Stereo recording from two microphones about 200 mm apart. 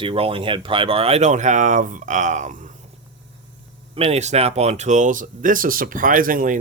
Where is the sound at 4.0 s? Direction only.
30° right (ahead or behind).